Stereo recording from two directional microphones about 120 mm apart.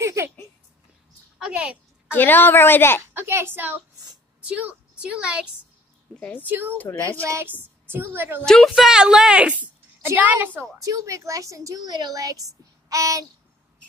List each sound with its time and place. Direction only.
0.0 s a sound: 25° right (ahead or behind)
1.4 s a child's voice: 10° right (ahead or behind)
2.0 s a woman's voice: 15° left (ahead or behind)
3.0 s a woman's voice: 20° right (ahead or behind)
6.1 s speech: 10° left (ahead or behind)
6.4 s a woman's voice: 20° right (ahead or behind)
8.5 s speech: centre (ahead or behind); by 10.7 s 15° right (ahead or behind)
10.8 s a woman's voice: 25° right (ahead or behind)